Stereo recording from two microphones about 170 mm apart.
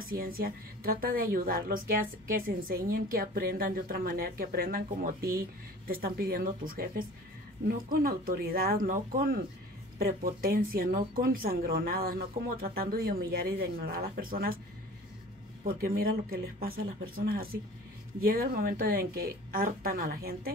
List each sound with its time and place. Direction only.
0.0 s a woman's voice: 60° right (ahead or behind)
15.6 s a woman's voice: 60° right (ahead or behind)